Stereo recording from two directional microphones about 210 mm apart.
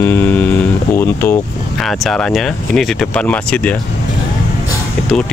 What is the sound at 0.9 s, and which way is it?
Speech, 10° left (ahead or behind).